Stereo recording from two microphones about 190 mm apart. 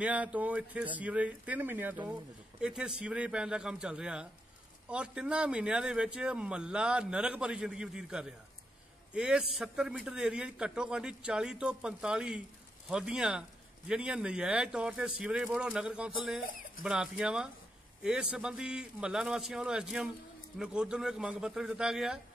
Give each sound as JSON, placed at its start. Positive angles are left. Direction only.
{"t": 0.0, "sound": "speech", "side_deg": -5}